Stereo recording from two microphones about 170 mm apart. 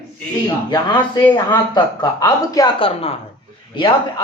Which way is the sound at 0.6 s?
25° left (ahead or behind).